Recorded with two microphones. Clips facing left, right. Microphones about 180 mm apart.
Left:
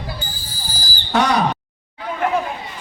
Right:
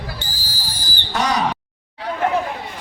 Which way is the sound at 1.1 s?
60° left (ahead or behind).